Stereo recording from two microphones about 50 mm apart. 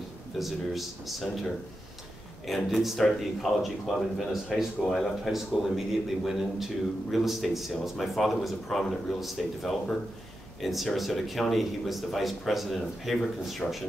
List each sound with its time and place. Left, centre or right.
0.4 s a man's voice: centre
2.4 s a man's voice: centre